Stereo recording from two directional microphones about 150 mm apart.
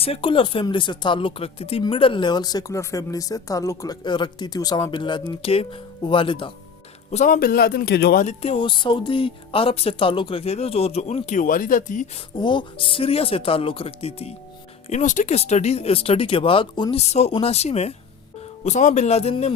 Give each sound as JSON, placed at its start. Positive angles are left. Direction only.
{"t": 0.0, "sound": "speech", "side_deg": 40}
{"t": 7.1, "sound": "a man's voice", "side_deg": 50}
{"t": 7.3, "sound": "a man's voice", "side_deg": 85}
{"t": 8.3, "sound": "speech", "side_deg": 40}
{"t": 12.4, "sound": "speech", "side_deg": 30}
{"t": 14.8, "sound": "speech", "side_deg": 55}
{"t": 17.0, "sound": "a man's voice", "side_deg": 45}